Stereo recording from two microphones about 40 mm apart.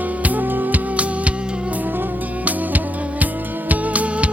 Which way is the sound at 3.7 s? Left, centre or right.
Right.